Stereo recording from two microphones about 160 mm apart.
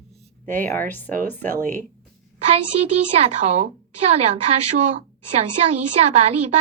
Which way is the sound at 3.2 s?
45° right (ahead or behind).